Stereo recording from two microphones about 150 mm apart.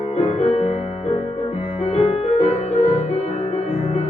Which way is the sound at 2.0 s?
45° left (ahead or behind).